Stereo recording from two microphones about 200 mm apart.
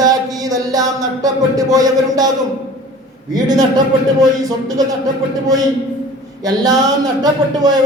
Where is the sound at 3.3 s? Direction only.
20° right (ahead or behind).